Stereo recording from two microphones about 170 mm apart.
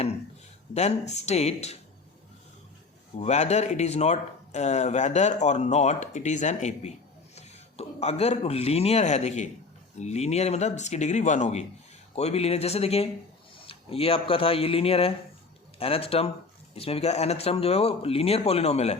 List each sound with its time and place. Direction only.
0.7 s speech: 40° left (ahead or behind)
3.2 s speech: 40° left (ahead or behind)